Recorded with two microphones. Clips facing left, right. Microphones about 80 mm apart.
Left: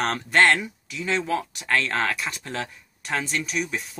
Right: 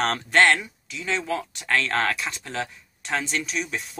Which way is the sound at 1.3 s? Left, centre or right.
Left.